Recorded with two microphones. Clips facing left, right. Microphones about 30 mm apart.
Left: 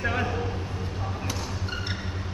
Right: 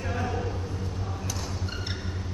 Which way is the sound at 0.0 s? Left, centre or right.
Left.